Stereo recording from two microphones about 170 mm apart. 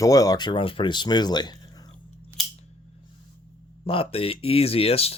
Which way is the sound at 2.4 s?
Centre (ahead or behind).